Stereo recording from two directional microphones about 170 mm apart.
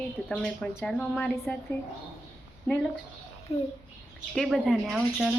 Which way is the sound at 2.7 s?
15° left (ahead or behind).